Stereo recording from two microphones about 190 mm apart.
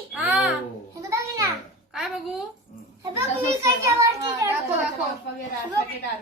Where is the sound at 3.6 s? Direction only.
15° right (ahead or behind).